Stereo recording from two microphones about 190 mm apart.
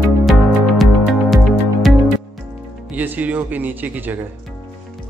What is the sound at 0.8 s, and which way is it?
Music, centre (ahead or behind).